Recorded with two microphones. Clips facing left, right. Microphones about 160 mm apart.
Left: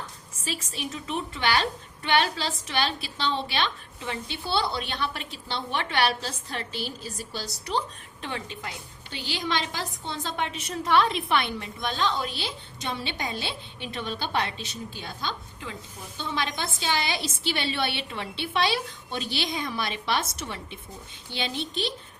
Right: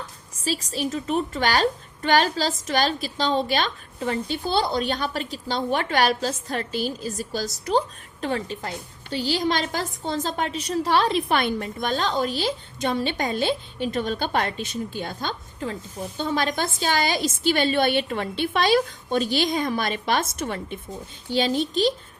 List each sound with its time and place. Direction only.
0.3 s a woman's voice: 35° right (ahead or behind)